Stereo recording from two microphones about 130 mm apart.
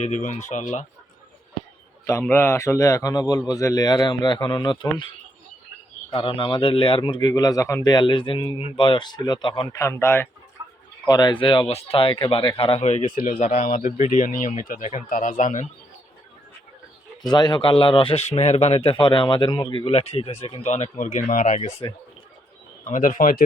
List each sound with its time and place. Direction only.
0.0 s speech: 65° left (ahead or behind)
2.3 s speech: 20° left (ahead or behind); by 9.6 s 35° left (ahead or behind)
9.7 s a man's voice: 20° left (ahead or behind)
11.1 s a man's voice: 35° left (ahead or behind); by 13.3 s 90° left
13.4 s speech: 75° left (ahead or behind)
14.7 s speech: 75° left (ahead or behind)
17.2 s a man's voice: 30° left (ahead or behind); by 21.8 s 60° left (ahead or behind)
22.8 s speech: 80° left